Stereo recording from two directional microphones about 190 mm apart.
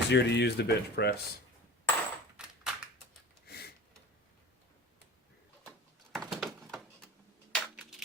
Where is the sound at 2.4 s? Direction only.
5° right (ahead or behind).